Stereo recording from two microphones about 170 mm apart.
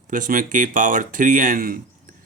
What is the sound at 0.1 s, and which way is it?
Speech, 50° right (ahead or behind).